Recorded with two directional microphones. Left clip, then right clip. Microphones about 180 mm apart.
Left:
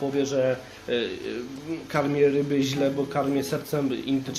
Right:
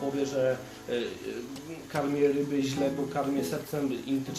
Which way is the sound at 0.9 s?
40° left (ahead or behind).